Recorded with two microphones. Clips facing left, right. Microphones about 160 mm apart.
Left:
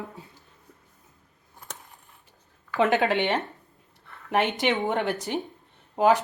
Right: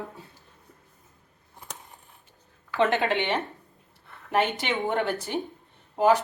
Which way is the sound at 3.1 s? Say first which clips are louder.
Left 2 dB; 20° left (ahead or behind).